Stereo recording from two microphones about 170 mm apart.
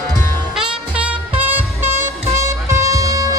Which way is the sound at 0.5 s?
5° right (ahead or behind).